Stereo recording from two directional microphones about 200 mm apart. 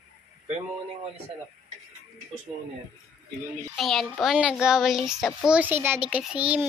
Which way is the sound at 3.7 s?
Centre (ahead or behind).